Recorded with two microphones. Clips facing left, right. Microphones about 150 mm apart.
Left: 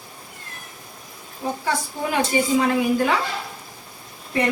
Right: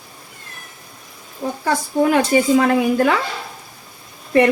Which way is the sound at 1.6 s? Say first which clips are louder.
Right 11 dB; 55° right (ahead or behind).